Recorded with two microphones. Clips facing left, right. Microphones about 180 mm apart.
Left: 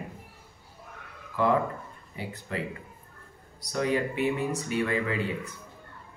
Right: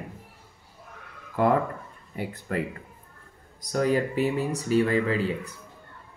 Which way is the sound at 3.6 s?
40° right (ahead or behind).